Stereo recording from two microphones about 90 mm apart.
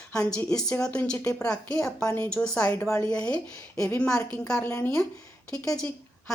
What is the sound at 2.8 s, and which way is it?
Speech, 35° left (ahead or behind).